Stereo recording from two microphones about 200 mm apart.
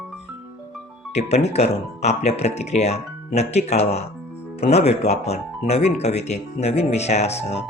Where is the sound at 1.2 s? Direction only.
30° left (ahead or behind).